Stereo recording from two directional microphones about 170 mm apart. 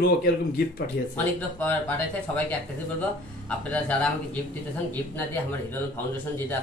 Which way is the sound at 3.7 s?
10° left (ahead or behind).